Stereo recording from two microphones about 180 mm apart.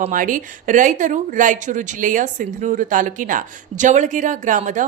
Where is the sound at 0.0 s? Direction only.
45° right (ahead or behind).